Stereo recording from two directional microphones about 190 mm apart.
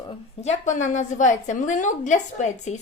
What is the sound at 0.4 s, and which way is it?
A woman's voice, 40° left (ahead or behind).